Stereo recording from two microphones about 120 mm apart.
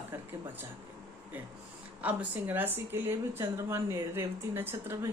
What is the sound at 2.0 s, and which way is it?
A woman's voice, 10° right (ahead or behind).